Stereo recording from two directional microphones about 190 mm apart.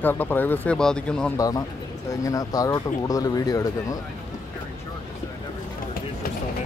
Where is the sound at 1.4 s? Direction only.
20° left (ahead or behind).